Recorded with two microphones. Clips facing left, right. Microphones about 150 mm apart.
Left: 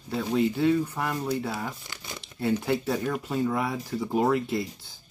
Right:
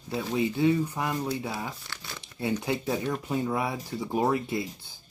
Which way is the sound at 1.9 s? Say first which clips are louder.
Left 1 dB; 15° left (ahead or behind).